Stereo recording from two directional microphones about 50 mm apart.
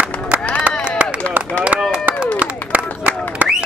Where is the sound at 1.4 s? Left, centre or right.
Right.